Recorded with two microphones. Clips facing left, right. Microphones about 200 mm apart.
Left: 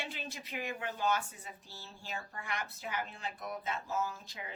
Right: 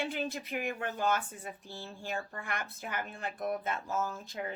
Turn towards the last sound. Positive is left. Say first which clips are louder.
# right 3 dB
turn(degrees=-50)  # may be behind; listen again after turning